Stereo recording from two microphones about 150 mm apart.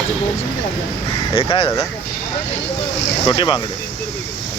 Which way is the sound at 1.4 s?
40° left (ahead or behind).